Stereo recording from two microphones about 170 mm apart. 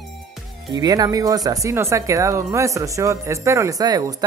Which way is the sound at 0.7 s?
20° right (ahead or behind).